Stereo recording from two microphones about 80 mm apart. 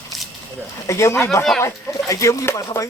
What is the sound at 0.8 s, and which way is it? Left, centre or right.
Speech, left.